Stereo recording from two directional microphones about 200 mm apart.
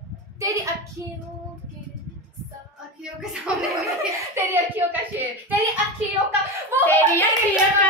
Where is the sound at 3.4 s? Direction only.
5° right (ahead or behind).